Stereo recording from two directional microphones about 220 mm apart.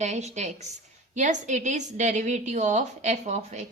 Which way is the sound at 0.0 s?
30° right (ahead or behind).